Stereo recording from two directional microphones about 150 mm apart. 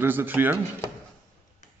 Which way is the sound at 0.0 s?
15° right (ahead or behind).